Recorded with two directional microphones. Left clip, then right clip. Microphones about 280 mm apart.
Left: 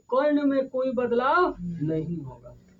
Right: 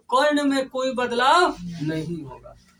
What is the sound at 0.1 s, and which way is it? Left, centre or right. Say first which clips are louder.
A man's voice: right 3 dB; left.